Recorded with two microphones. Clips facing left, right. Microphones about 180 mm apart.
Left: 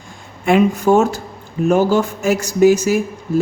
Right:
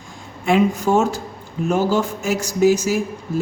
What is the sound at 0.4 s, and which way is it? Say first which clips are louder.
Speech: left 3 dB; 60° left (ahead or behind).